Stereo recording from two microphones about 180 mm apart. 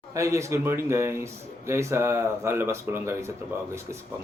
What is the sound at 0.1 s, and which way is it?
Speech, 15° right (ahead or behind).